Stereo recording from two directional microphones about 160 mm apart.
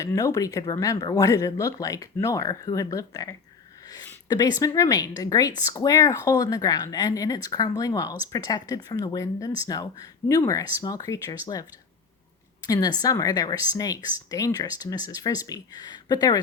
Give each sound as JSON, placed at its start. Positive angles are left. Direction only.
{"t": 0.0, "sound": "speech", "side_deg": 20}
{"t": 3.8, "sound": "a sound", "side_deg": 25}
{"t": 4.6, "sound": "speech", "side_deg": 20}
{"t": 12.6, "sound": "speech", "side_deg": 25}